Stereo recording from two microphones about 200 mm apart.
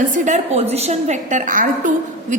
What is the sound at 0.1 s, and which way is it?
A woman's voice, 35° right (ahead or behind).